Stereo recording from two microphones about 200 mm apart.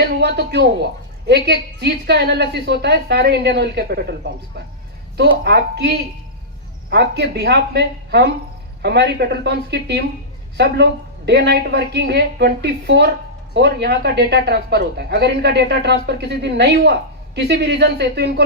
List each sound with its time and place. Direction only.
0.0 s a woman's voice: 55° right (ahead or behind)
11.3 s a woman's voice: 55° right (ahead or behind)